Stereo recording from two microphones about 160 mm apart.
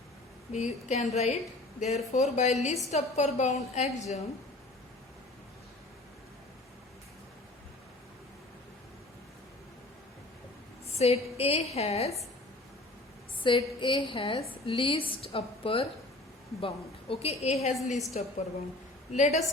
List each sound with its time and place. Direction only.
0.5 s a woman's voice: 45° left (ahead or behind)
10.9 s a woman's voice: 40° left (ahead or behind)
13.4 s a woman's voice: 30° left (ahead or behind); by 19.4 s 45° left (ahead or behind)